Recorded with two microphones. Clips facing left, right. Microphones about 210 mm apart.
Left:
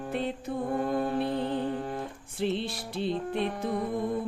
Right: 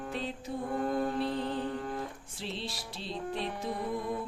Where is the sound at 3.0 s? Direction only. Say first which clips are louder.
Left 7 dB; 55° left (ahead or behind).